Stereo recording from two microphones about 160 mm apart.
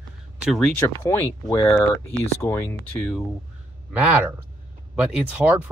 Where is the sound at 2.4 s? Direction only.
15° left (ahead or behind).